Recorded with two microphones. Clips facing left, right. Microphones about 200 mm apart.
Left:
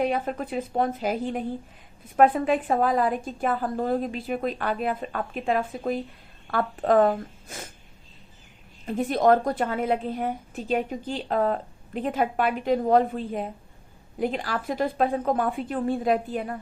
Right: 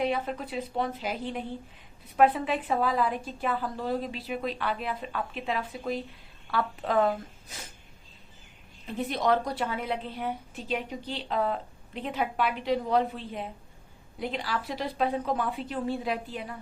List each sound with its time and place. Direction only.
0.0 s a woman's voice: 50° left (ahead or behind)
8.9 s a woman's voice: 50° left (ahead or behind)